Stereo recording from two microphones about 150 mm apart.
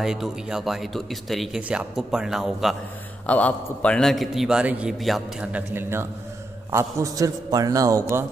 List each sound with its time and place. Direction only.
0.0 s a man's voice: 5° right (ahead or behind)
3.3 s a man's voice: 10° left (ahead or behind); by 8.3 s 20° right (ahead or behind)